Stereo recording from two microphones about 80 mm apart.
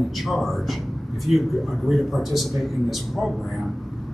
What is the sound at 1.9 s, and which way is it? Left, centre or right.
A man's voice, centre.